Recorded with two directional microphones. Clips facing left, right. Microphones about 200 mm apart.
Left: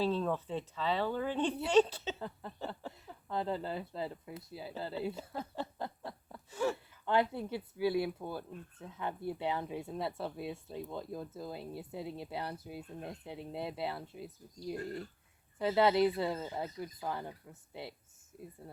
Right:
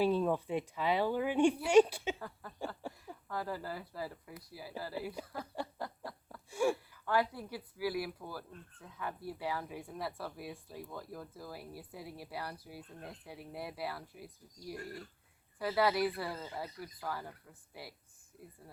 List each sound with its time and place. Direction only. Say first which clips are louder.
0.0 s a woman's voice: right 2 dB; 15° right (ahead or behind)
2.1 s speech: left 4 dB; 25° left (ahead or behind)
2.8 s a sound: right 1 dB; 10° right (ahead or behind)
3.2 s speech: left 4 dB; 25° left (ahead or behind)
6.5 s a sound: right 2 dB; 10° right (ahead or behind)
7.0 s speech: left 3 dB; 25° left (ahead or behind)